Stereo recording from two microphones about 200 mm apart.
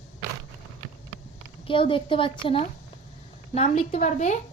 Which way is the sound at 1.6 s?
25° left (ahead or behind).